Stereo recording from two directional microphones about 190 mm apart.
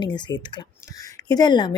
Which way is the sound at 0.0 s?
25° left (ahead or behind).